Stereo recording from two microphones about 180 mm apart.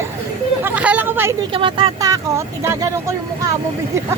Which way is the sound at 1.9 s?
20° right (ahead or behind).